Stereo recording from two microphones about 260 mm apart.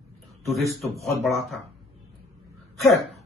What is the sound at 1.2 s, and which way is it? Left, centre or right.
Speech, centre.